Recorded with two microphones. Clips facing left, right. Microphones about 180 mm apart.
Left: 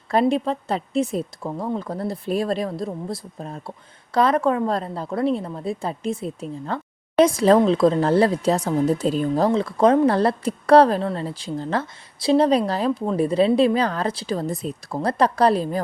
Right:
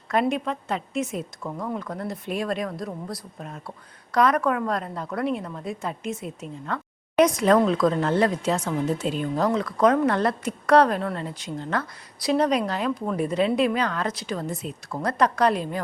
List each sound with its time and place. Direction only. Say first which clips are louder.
0.1 s a woman's voice: left 4 dB; 30° left (ahead or behind)